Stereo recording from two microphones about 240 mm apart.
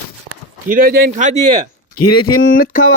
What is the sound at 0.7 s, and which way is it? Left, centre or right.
Speech, right.